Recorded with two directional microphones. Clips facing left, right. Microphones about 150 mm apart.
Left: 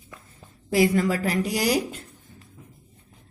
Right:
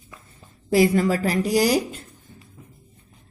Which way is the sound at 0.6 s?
35° right (ahead or behind).